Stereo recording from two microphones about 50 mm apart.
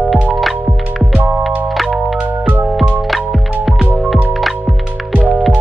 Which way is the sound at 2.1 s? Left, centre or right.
Right.